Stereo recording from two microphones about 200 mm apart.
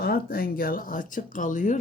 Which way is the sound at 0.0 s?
50° left (ahead or behind).